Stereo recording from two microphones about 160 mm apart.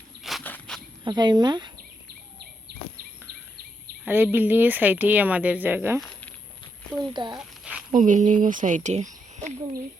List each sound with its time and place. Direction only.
0.2 s walk: centre (ahead or behind)
0.4 s insect: 10° left (ahead or behind)
1.0 s speech: 25° right (ahead or behind)
4.0 s speech: 15° right (ahead or behind)
6.0 s a sound: 10° left (ahead or behind)
7.1 s speech: 30° right (ahead or behind)
7.3 s a sound: 5° right (ahead or behind)
7.9 s speech: 50° right (ahead or behind)